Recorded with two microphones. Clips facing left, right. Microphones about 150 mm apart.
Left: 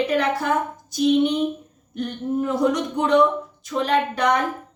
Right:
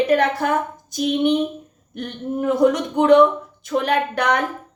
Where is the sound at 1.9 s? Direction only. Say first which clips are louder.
Left 2 dB; 55° right (ahead or behind).